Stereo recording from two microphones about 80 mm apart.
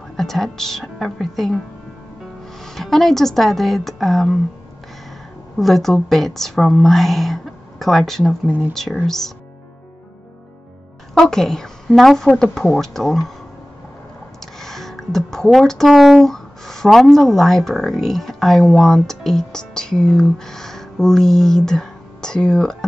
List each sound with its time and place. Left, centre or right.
0.2 s a woman's voice: centre
2.6 s a woman's voice: centre
5.6 s a woman's voice: centre
8.5 s speech: right
9.0 s a woman's voice: centre
11.1 s a woman's voice: centre
14.4 s speech: centre